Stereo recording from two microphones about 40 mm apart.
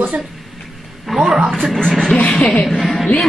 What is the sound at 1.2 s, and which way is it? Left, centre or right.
Speech, centre.